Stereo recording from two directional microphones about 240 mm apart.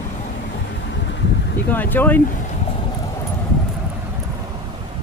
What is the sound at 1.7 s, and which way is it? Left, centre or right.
Speech, centre.